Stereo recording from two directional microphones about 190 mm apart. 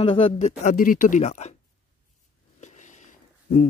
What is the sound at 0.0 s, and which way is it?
Speech, 30° left (ahead or behind).